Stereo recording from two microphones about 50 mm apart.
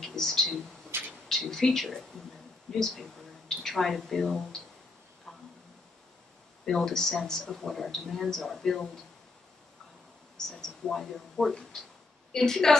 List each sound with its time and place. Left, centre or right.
0.0 s speech: centre
0.9 s a sound: right
1.3 s speech: centre
6.6 s speech: centre
10.5 s a woman's voice: centre